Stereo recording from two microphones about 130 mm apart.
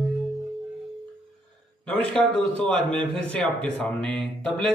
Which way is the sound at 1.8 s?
5° left (ahead or behind).